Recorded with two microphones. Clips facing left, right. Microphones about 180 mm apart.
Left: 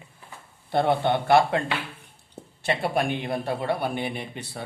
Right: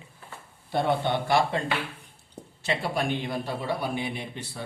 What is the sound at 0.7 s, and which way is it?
Speech, 60° left (ahead or behind).